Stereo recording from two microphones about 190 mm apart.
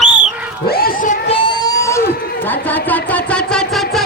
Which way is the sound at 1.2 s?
25° left (ahead or behind).